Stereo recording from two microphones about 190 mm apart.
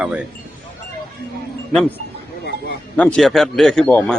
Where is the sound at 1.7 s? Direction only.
5° left (ahead or behind).